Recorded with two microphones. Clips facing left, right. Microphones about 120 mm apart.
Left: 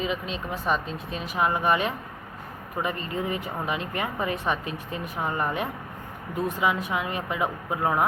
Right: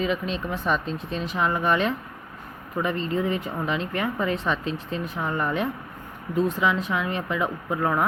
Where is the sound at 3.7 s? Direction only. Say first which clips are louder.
Right 3 dB; 15° left (ahead or behind).